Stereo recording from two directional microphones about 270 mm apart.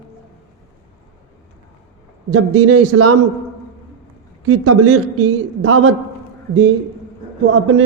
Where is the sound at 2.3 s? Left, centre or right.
Right.